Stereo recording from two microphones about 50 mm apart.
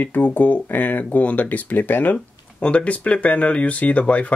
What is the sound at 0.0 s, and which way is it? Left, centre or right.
Speech, left.